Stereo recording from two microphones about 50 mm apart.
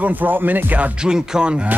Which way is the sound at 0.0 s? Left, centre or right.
Right.